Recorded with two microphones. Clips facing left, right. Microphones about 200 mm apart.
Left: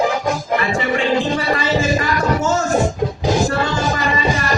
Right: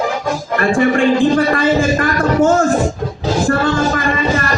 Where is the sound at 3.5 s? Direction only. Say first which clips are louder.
Right 5 dB; 50° right (ahead or behind).